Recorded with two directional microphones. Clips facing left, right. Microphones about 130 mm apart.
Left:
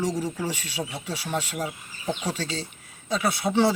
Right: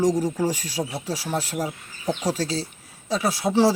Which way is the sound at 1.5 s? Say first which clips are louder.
Right 3 dB; 10° right (ahead or behind).